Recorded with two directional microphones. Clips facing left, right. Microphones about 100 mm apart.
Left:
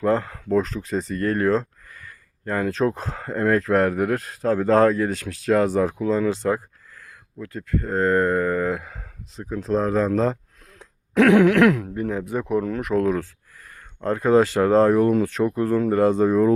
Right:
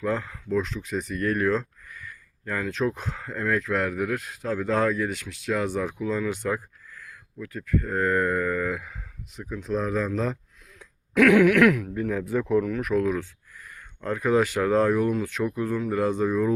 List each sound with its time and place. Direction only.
0.0 s speech: 35° left (ahead or behind); by 12.6 s 20° left (ahead or behind)
13.0 s speech: 40° left (ahead or behind)